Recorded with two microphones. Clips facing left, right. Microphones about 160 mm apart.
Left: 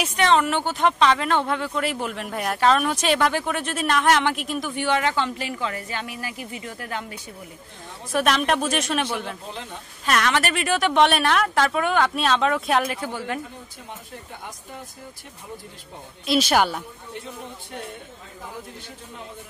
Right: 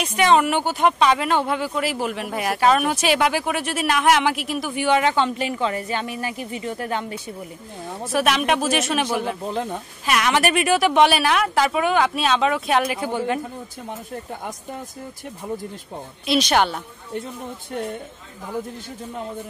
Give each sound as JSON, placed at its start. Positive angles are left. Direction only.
{"t": 0.0, "sound": "speech", "side_deg": -5}
{"t": 8.1, "sound": "a woman's voice", "side_deg": -5}
{"t": 9.5, "sound": "speech", "side_deg": -50}
{"t": 10.0, "sound": "a woman's voice", "side_deg": -10}
{"t": 13.0, "sound": "speech", "side_deg": -20}
{"t": 16.3, "sound": "a woman's voice", "side_deg": 5}